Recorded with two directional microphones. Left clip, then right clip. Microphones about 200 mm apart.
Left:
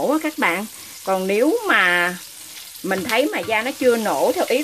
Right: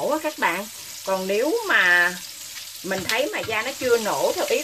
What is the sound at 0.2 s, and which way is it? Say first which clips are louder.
Frying: left 3 dB; 45° left (ahead or behind).